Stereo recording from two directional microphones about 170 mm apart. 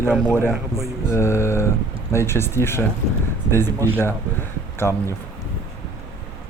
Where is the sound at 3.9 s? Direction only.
10° left (ahead or behind).